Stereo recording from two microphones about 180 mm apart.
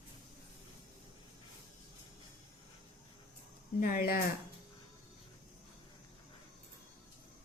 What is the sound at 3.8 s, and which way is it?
Speech, 55° left (ahead or behind).